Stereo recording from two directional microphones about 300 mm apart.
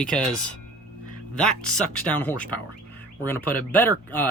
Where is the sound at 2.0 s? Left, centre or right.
Centre.